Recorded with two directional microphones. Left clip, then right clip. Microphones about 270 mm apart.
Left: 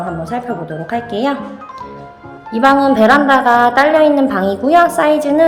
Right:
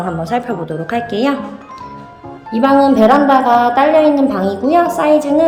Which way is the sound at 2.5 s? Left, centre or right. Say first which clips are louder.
Even; centre.